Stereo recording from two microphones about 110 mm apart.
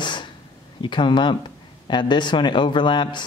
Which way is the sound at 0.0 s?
45° left (ahead or behind).